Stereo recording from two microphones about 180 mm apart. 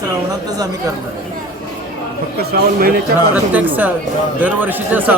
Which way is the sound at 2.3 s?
60° right (ahead or behind).